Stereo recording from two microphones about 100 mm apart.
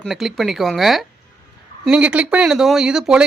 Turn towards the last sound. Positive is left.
turn(degrees=-5)  # may be behind; listen again after turning